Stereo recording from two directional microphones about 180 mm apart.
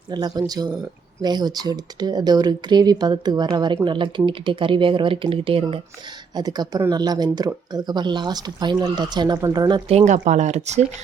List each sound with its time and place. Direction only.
0.1 s speech: 25° right (ahead or behind)
10.0 s speech: 40° right (ahead or behind)